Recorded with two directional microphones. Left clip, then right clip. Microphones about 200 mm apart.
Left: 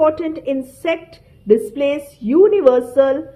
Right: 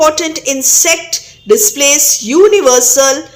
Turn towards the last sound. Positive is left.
turn(degrees=-10)  # may be behind; listen again after turning